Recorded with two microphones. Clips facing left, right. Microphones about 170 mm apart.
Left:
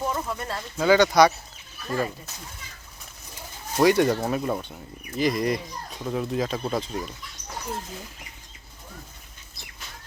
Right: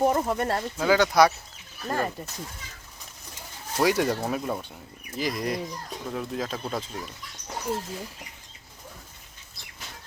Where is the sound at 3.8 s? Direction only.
5° right (ahead or behind).